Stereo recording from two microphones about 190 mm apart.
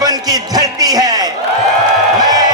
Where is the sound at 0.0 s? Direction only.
20° right (ahead or behind).